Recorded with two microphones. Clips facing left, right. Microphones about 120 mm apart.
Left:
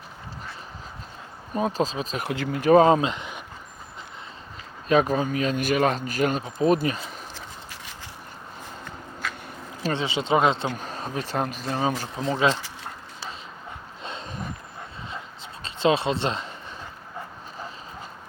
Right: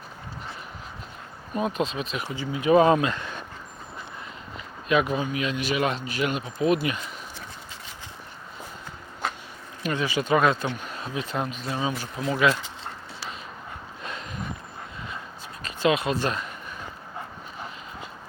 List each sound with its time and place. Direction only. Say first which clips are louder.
1.5 s a man's voice: left 2 dB; 35° left (ahead or behind)
2.2 s speech: left 3 dB; 75° left (ahead or behind)
2.8 s speech: left 1 dB; 25° left (ahead or behind)
4.9 s a man's voice: left 3 dB; 35° left (ahead or behind)
9.8 s speech: even; 25° left (ahead or behind)
10.7 s a man's voice: left 1 dB; 40° left (ahead or behind)
12.1 s speech: right 2 dB; 30° left (ahead or behind)
14.0 s horse: left 1 dB; 25° left (ahead or behind)
15.6 s speech: left 1 dB; 30° left (ahead or behind)